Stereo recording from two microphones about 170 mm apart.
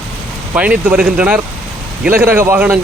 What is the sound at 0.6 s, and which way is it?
Speech, 10° right (ahead or behind).